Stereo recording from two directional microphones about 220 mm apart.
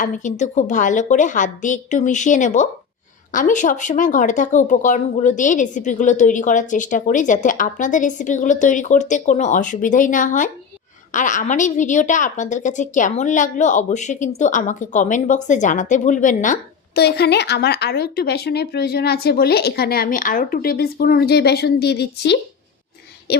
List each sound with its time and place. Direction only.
0.0 s a woman's voice: 35° left (ahead or behind)